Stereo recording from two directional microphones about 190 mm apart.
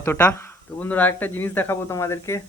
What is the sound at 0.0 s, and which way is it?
Speech, 10° left (ahead or behind).